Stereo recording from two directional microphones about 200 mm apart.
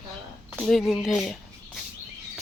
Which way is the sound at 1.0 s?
Centre (ahead or behind).